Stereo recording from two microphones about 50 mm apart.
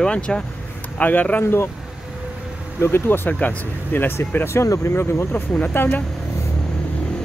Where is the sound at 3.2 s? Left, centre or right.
Left.